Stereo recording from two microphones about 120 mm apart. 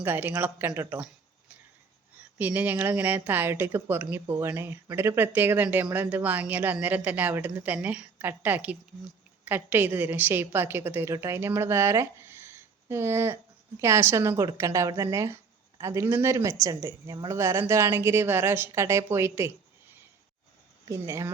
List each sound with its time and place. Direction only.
0.0 s speech: 15° right (ahead or behind)
2.4 s a woman's voice: 15° right (ahead or behind)
20.9 s a woman's voice: 25° right (ahead or behind)